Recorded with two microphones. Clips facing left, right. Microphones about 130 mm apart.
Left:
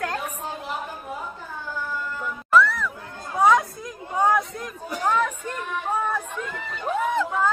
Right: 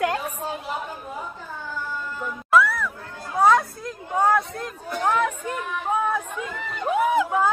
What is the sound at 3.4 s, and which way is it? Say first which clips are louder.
Chatter: even; 15° left (ahead or behind).